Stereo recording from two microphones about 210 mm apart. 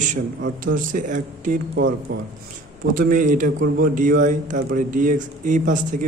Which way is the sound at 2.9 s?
40° right (ahead or behind).